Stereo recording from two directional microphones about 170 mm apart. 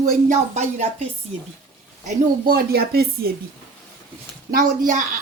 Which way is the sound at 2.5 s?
65° right (ahead or behind).